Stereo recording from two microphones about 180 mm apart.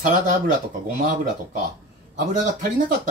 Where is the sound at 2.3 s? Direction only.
45° right (ahead or behind).